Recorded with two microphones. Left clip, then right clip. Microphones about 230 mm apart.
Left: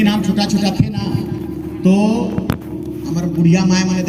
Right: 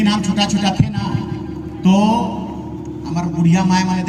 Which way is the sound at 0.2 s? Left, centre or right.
Right.